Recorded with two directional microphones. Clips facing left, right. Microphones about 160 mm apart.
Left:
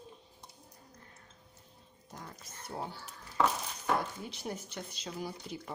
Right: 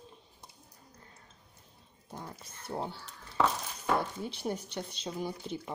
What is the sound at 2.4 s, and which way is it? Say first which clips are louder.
Speech: right 3 dB; 30° right (ahead or behind).